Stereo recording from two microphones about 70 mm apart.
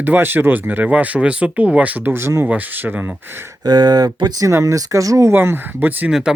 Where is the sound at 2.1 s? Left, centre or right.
Right.